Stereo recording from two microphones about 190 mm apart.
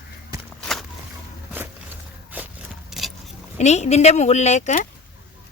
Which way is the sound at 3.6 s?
35° left (ahead or behind).